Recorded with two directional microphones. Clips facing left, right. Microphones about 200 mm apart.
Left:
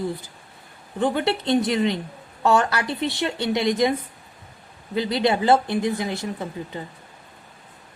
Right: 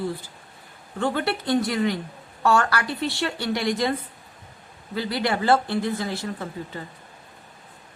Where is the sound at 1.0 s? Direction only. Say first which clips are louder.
Left 3 dB; 20° left (ahead or behind).